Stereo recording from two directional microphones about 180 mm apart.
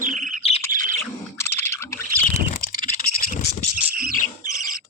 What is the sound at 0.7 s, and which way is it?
Bird, 50° right (ahead or behind).